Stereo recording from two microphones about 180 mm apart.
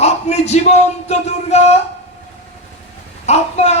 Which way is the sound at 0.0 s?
40° left (ahead or behind).